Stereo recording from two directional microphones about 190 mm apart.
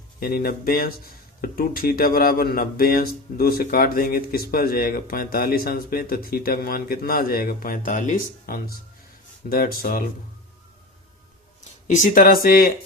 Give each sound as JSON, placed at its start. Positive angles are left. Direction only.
{"t": 0.2, "sound": "speech", "side_deg": 50}
{"t": 11.9, "sound": "speech", "side_deg": 45}